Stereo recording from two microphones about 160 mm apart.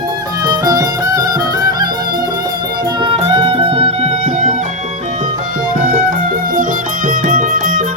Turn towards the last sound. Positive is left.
turn(degrees=-55)  # may be behind; listen again after turning